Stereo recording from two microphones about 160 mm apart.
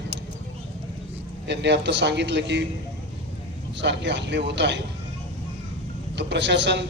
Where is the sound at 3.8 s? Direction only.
90° right.